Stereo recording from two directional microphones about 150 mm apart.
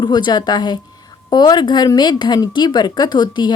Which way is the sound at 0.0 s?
30° left (ahead or behind).